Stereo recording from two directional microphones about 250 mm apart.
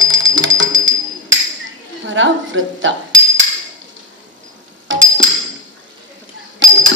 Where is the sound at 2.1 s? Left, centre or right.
Right.